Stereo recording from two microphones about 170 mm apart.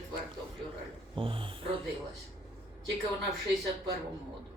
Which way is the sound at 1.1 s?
30° right (ahead or behind).